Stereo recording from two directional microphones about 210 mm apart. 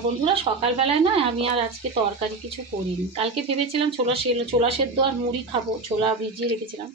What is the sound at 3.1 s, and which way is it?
Speech, 30° right (ahead or behind).